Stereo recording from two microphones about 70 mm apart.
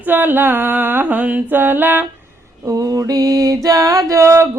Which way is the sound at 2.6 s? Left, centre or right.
Right.